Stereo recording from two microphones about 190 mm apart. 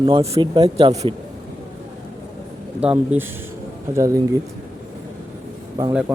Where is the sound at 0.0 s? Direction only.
20° right (ahead or behind).